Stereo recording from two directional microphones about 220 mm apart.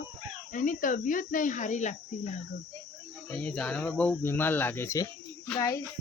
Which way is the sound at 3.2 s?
5° left (ahead or behind).